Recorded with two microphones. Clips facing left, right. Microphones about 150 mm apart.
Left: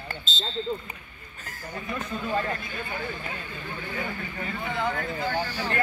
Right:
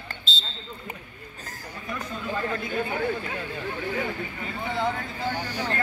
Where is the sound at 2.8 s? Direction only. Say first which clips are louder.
Right 7 dB; 60° right (ahead or behind).